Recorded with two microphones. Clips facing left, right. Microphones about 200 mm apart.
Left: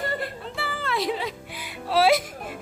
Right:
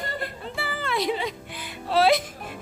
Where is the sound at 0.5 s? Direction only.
Centre (ahead or behind).